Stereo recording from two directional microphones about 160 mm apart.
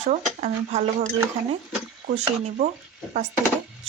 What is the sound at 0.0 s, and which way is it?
Speech, 45° right (ahead or behind).